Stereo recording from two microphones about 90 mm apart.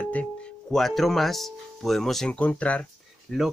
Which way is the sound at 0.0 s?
15° left (ahead or behind).